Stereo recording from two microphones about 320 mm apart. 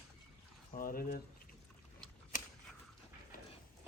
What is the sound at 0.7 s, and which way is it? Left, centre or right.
Speech, left.